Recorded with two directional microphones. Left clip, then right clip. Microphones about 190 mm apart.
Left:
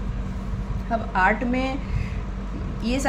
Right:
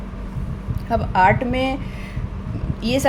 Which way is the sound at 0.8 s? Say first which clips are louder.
Right 5 dB; 55° right (ahead or behind).